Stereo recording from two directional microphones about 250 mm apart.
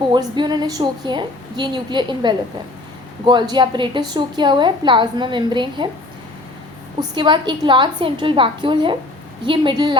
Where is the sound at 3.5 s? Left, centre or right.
Centre.